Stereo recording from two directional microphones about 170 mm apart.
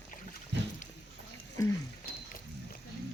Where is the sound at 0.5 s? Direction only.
90° right.